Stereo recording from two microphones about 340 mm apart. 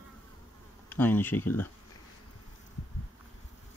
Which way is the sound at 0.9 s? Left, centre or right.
Centre.